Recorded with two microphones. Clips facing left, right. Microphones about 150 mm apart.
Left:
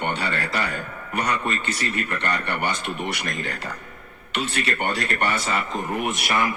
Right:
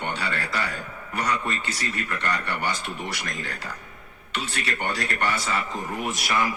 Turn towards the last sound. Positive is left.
turn(degrees=55)  # may be behind; listen again after turning